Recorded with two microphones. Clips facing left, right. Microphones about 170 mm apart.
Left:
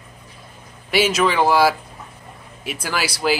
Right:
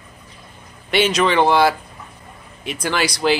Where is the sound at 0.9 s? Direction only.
5° left (ahead or behind).